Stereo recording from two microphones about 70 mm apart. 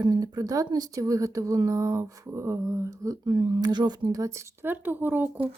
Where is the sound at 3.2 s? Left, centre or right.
Right.